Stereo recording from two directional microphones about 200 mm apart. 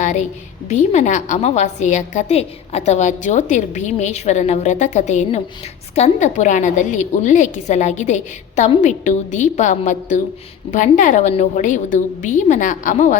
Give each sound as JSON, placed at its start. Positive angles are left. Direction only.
{"t": 0.0, "sound": "a woman's voice", "side_deg": 35}